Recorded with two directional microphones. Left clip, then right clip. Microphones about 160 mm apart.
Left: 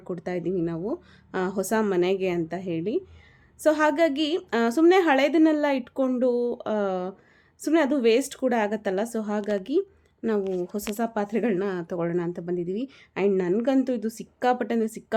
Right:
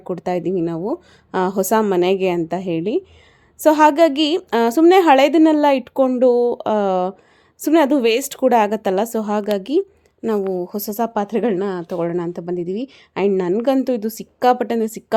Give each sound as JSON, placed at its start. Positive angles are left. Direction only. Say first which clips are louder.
{"t": 0.0, "sound": "a woman's voice", "louder": "right 8 dB", "side_deg": -30}